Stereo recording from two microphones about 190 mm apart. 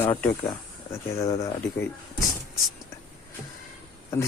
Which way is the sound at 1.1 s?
15° left (ahead or behind).